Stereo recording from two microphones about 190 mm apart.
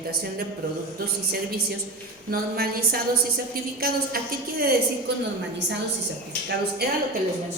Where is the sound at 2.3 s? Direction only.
50° right (ahead or behind).